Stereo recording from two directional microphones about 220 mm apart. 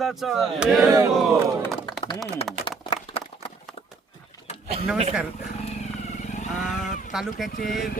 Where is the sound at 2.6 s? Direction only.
25° left (ahead or behind).